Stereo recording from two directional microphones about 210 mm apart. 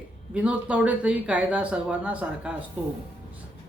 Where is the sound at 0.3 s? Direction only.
5° right (ahead or behind).